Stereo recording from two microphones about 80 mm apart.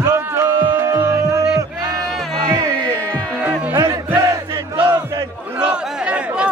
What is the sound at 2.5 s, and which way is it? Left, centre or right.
Music, right.